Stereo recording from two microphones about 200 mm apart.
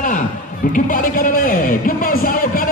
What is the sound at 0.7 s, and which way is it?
Music, 45° left (ahead or behind).